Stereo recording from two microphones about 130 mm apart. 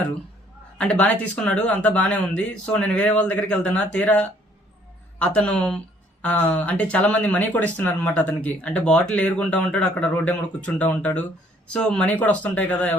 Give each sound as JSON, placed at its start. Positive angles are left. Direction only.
{"t": 0.8, "sound": "speech", "side_deg": 10}